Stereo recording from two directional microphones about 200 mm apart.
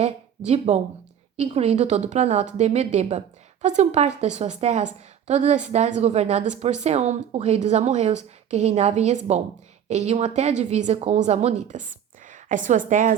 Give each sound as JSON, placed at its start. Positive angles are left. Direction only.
{"t": 0.0, "sound": "a woman's voice", "side_deg": -30}